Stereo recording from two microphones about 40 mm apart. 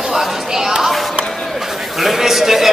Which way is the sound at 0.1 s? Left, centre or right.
Centre.